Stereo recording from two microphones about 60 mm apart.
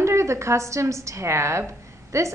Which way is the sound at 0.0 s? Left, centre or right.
Right.